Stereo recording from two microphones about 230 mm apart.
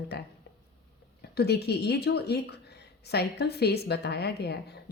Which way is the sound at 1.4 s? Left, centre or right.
Left.